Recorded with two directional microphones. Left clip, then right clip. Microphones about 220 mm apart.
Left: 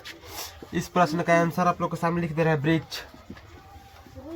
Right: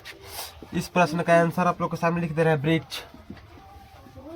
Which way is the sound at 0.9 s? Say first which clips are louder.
Right 2 dB; 35° right (ahead or behind).